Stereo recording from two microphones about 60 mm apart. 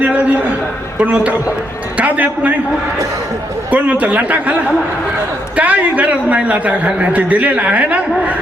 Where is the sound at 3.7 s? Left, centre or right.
Right.